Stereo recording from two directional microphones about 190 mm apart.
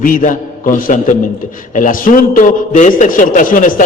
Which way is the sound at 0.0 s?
45° left (ahead or behind).